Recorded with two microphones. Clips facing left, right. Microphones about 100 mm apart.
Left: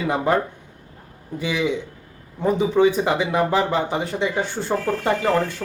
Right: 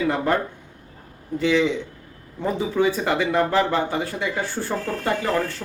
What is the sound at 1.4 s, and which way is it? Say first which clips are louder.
A man's voice: right 3 dB; 15° left (ahead or behind).